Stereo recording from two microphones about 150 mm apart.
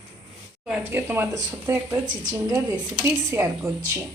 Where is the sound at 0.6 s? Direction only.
10° right (ahead or behind).